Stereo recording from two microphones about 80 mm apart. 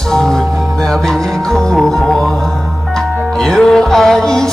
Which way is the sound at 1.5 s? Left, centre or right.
Centre.